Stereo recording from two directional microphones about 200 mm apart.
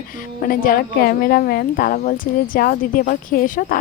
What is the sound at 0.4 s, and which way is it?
Speech, 45° left (ahead or behind).